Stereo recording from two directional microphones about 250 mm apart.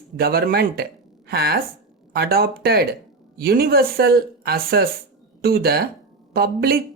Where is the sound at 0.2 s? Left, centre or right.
Right.